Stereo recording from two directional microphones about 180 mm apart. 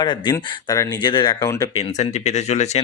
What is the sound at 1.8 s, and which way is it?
Speech, 40° left (ahead or behind).